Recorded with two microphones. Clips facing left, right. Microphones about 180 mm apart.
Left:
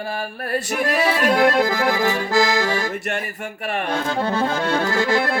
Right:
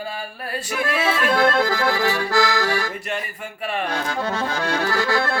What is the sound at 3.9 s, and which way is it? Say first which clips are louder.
Accordion: left 3 dB; 30° left (ahead or behind).